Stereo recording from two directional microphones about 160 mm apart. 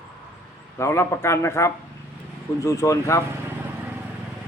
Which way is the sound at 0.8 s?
15° left (ahead or behind).